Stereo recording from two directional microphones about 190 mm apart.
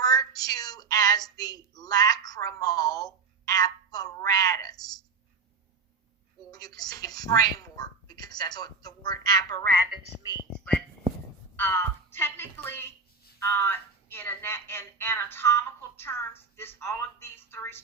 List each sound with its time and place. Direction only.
0.0 s a woman's voice: 20° left (ahead or behind)
6.5 s a woman's voice: 20° left (ahead or behind)
10.5 s a sound: 5° left (ahead or behind)
11.5 s a woman's voice: 10° left (ahead or behind)